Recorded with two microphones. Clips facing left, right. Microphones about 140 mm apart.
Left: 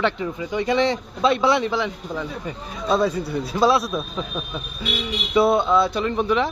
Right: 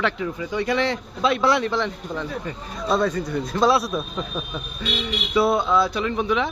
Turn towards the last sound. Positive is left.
turn(degrees=0)  # may be behind; listen again after turning